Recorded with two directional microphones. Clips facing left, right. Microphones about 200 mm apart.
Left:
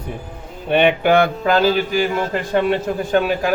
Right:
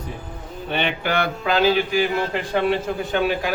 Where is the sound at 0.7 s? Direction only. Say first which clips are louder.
Left 9 dB; 55° left (ahead or behind).